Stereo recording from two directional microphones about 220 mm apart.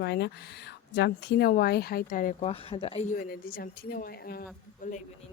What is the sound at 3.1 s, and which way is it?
Speech, 40° left (ahead or behind).